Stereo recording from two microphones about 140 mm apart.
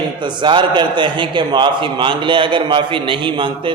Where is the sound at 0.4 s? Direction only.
35° right (ahead or behind).